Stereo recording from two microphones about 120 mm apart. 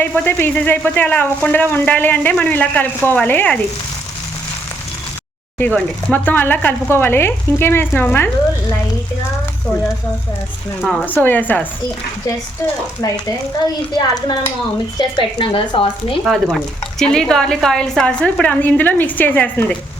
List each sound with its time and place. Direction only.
0.0 s speech: 15° left (ahead or behind)
5.5 s speech: 10° left (ahead or behind)
10.8 s speech: centre (ahead or behind)
11.0 s speech: 15° left (ahead or behind)
14.9 s speech: 40° left (ahead or behind)
16.2 s speech: centre (ahead or behind); by 19.6 s 15° left (ahead or behind)